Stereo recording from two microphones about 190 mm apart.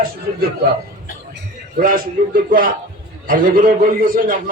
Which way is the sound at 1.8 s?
50° right (ahead or behind).